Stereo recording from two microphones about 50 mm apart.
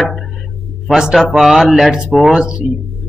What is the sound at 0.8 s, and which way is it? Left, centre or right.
Speech, centre.